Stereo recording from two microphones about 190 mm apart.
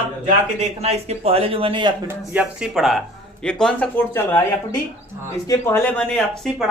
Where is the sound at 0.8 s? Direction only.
35° right (ahead or behind).